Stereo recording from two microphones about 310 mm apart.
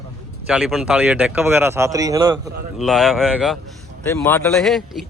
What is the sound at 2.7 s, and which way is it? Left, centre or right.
Speech, centre.